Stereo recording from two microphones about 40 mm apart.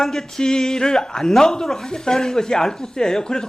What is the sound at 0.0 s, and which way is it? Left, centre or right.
Speech, centre.